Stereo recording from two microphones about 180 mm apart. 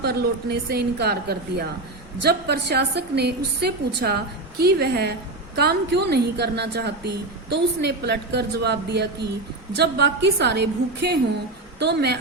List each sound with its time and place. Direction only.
0.0 s a woman's voice: 60° right (ahead or behind)